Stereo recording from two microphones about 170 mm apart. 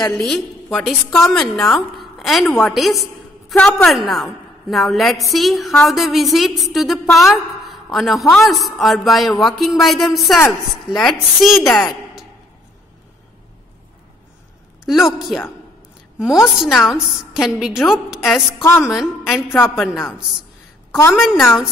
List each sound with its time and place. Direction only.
0.0 s a woman's voice: centre (ahead or behind)
14.9 s a woman's voice: centre (ahead or behind)
19.5 s a woman's voice: 15° left (ahead or behind)
19.8 s a woman's voice: centre (ahead or behind)